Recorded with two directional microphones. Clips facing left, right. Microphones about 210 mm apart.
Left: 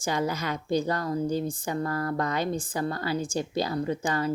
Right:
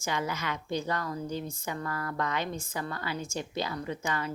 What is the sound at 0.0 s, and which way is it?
A woman's voice, 40° left (ahead or behind).